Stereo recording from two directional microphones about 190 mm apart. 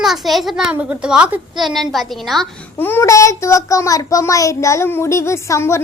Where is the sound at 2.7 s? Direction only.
10° left (ahead or behind).